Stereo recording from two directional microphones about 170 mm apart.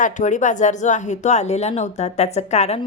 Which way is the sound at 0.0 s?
45° left (ahead or behind).